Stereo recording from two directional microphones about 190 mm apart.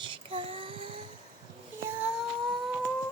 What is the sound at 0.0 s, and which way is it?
Child singing, 25° right (ahead or behind).